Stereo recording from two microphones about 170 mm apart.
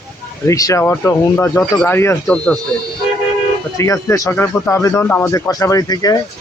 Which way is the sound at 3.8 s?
20° left (ahead or behind).